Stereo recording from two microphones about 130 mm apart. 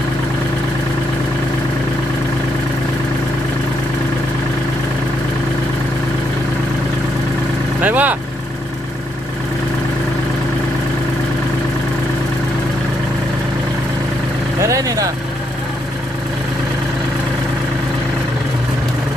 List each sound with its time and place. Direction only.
7.8 s speech: 10° right (ahead or behind)
14.6 s vehicle: 25° right (ahead or behind)